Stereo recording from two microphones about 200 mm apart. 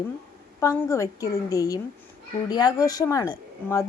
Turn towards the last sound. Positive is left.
turn(degrees=15)  # may be behind; listen again after turning